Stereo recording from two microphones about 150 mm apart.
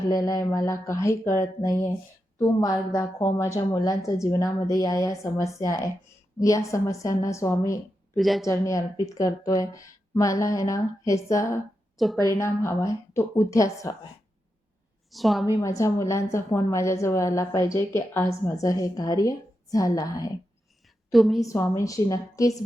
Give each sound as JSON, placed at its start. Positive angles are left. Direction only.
{"t": 0.1, "sound": "a woman's voice", "side_deg": 25}
{"t": 3.3, "sound": "a woman's voice", "side_deg": 15}
{"t": 8.1, "sound": "a woman's voice", "side_deg": 0}
{"t": 8.4, "sound": "a woman's voice", "side_deg": 20}
{"t": 15.1, "sound": "a woman's voice", "side_deg": 0}
{"t": 15.6, "sound": "a woman's voice", "side_deg": 20}
{"t": 21.1, "sound": "a woman's voice", "side_deg": 0}
{"t": 21.4, "sound": "a woman's voice", "side_deg": 20}